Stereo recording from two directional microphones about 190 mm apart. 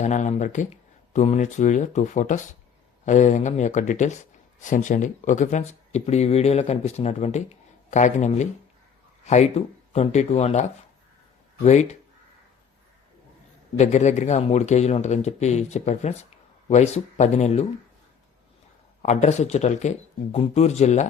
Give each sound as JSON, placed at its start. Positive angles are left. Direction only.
{"t": 0.0, "sound": "speech", "side_deg": 40}
{"t": 13.7, "sound": "speech", "side_deg": 35}
{"t": 19.0, "sound": "speech", "side_deg": 35}